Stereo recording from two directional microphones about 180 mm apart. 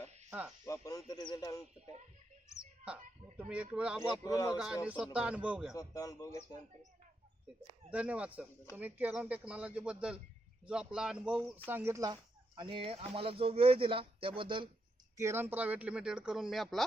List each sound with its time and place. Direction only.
0.3 s speech: 5° right (ahead or behind)
0.6 s speech: 20° left (ahead or behind)
3.3 s speech: 5° right (ahead or behind)
4.2 s speech: 20° left (ahead or behind)
4.5 s speech: 5° right (ahead or behind)
5.9 s speech: 20° left (ahead or behind)
7.9 s speech: 5° right (ahead or behind); by 14.7 s 30° right (ahead or behind)
15.2 s speech: 15° right (ahead or behind)